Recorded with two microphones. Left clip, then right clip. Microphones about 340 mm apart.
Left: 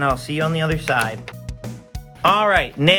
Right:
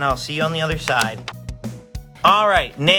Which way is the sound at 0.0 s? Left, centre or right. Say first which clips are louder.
Even; centre.